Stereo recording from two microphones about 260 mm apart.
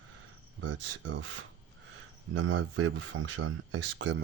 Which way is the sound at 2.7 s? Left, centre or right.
Right.